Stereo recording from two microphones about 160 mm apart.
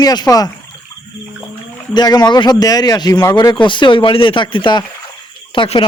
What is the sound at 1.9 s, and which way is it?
A man's voice, 25° left (ahead or behind).